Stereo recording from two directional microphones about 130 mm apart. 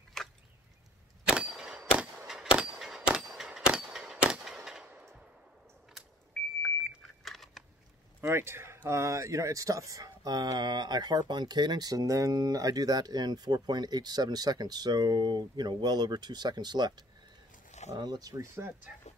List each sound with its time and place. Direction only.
0.2 s chop: 5° left (ahead or behind)
1.2 s clang: 5° right (ahead or behind)
6.6 s beep: centre (ahead or behind)
8.2 s speech: 20° right (ahead or behind)
17.6 s a sound: 60° left (ahead or behind)
17.9 s speech: 30° right (ahead or behind)